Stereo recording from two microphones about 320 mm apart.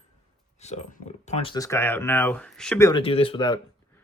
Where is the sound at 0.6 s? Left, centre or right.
Left.